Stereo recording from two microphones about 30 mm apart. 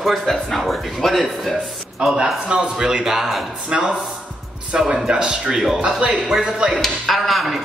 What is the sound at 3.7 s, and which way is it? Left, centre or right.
A man's voice, right.